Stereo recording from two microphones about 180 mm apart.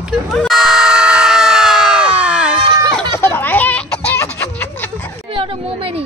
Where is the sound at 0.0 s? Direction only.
Centre (ahead or behind).